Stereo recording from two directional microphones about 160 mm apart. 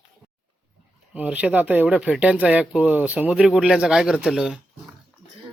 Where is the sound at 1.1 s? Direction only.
10° right (ahead or behind).